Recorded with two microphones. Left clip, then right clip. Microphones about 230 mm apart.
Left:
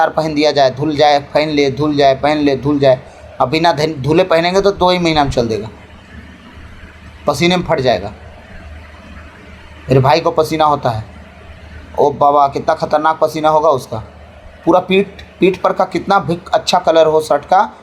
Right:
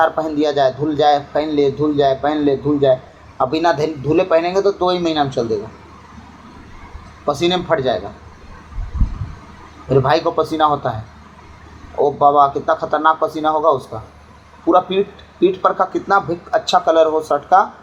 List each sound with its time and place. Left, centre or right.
0.0 s a man's voice: left
7.3 s a man's voice: left
9.9 s a man's voice: left
11.9 s a man's voice: left